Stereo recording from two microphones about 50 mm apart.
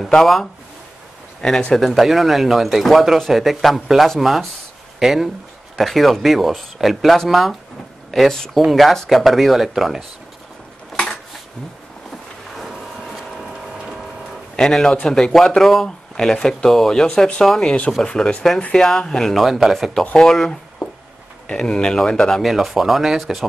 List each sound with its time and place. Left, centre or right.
0.0 s speech: centre
1.9 s speech: centre
12.5 s a sound: centre
13.5 s ratchet: centre
14.6 s speech: centre
19.3 s speech: centre
20.2 s speech: centre
20.8 s a sound: centre
21.5 s speech: centre
22.4 s speech: centre